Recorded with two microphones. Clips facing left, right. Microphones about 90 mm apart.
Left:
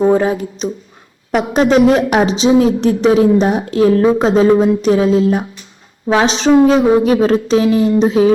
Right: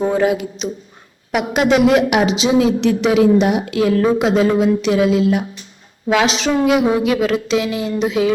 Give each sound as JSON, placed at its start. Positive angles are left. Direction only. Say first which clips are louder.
{"t": 0.1, "sound": "a woman's voice", "louder": "left 3 dB", "side_deg": 35}